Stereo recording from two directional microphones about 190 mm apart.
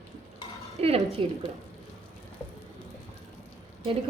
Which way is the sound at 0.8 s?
30° right (ahead or behind).